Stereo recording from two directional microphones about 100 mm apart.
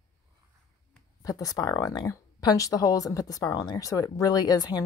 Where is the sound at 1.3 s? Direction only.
35° left (ahead or behind).